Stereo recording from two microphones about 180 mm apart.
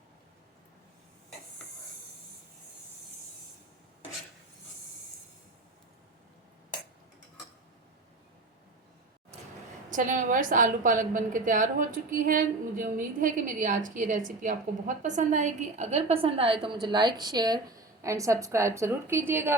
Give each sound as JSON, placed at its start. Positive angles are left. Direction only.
{"t": 9.9, "sound": "a woman's voice", "side_deg": -45}